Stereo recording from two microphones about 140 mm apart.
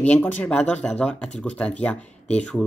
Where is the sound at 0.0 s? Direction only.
10° left (ahead or behind).